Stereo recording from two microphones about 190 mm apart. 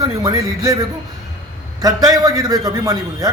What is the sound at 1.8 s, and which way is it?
A man's voice, 15° right (ahead or behind).